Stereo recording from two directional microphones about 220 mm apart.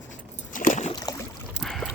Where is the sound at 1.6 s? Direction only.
5° left (ahead or behind).